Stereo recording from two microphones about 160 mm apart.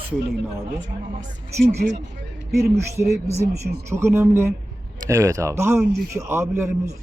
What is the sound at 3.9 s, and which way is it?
A man's voice, 15° right (ahead or behind).